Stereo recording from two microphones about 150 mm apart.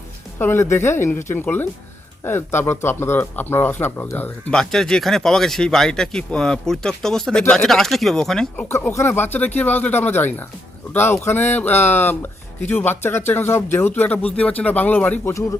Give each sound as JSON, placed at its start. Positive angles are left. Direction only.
{"t": 0.3, "sound": "speech", "side_deg": 15}
{"t": 8.7, "sound": "speech", "side_deg": 15}